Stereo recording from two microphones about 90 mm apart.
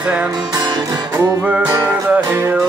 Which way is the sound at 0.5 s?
50° right (ahead or behind).